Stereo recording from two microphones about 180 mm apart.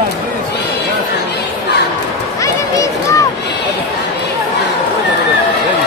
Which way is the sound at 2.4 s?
20° left (ahead or behind).